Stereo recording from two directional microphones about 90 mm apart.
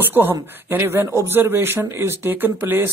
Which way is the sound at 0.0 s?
25° right (ahead or behind).